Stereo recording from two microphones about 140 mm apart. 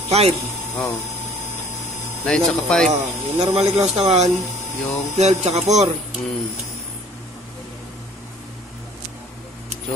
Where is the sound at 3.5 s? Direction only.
45° right (ahead or behind).